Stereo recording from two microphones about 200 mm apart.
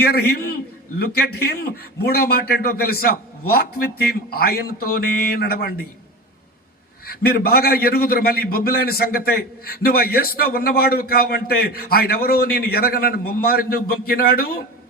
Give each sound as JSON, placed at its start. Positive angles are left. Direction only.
{"t": 0.0, "sound": "a man's voice", "side_deg": 50}
{"t": 7.0, "sound": "a man's voice", "side_deg": 50}